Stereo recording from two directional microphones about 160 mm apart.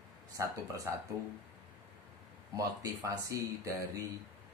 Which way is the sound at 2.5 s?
20° right (ahead or behind).